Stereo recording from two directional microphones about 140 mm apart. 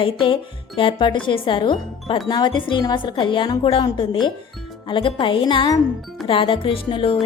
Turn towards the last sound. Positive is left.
turn(degrees=40)  # may be behind; listen again after turning